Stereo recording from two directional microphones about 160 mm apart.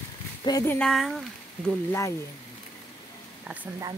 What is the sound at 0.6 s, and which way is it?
Speech, 15° left (ahead or behind).